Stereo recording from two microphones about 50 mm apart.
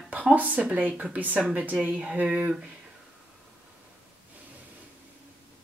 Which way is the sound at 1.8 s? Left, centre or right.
Right.